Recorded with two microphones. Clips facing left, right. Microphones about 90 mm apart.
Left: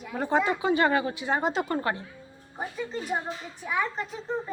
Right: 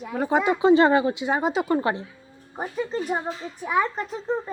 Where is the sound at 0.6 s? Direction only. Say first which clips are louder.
Right 7 dB; 25° right (ahead or behind).